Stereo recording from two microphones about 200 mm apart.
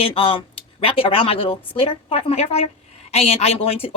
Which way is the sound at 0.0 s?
25° left (ahead or behind).